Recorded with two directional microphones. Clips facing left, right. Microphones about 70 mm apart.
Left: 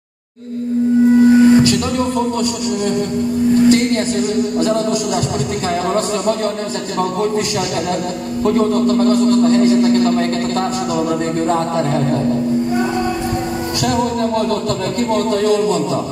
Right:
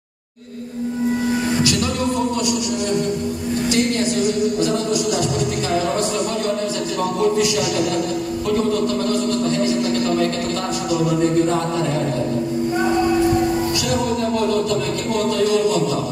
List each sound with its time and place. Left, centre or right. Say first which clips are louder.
3.6 s a sound: left 3 dB; left
8.5 s speech: left 6 dB; left
15.1 s speech: left 2 dB; left